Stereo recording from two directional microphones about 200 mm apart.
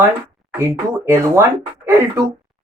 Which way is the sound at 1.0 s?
15° right (ahead or behind).